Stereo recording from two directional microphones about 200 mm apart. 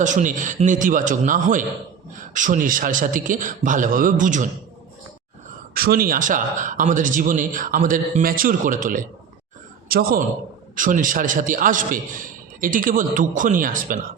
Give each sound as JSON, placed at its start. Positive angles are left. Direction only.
{"t": 0.0, "sound": "speech", "side_deg": -40}
{"t": 5.7, "sound": "a man's voice", "side_deg": -50}